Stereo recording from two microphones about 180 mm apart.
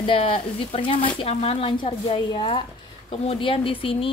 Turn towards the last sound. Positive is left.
turn(degrees=30)  # may be behind; listen again after turning